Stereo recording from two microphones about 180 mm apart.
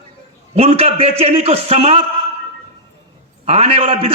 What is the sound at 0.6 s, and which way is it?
A man's voice, 35° right (ahead or behind).